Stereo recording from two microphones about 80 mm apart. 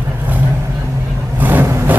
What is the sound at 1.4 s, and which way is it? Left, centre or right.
Vehicle, right.